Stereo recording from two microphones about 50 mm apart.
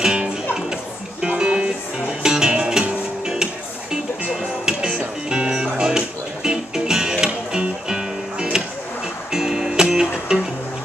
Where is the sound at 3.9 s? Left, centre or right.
Centre.